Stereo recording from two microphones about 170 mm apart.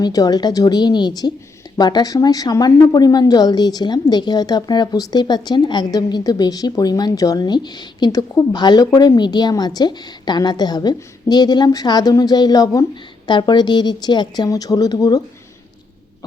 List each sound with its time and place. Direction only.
0.0 s a woman's voice: 20° left (ahead or behind)